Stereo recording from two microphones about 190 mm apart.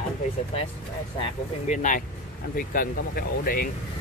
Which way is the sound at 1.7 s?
40° left (ahead or behind).